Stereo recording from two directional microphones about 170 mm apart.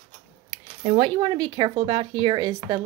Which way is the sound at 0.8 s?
45° right (ahead or behind).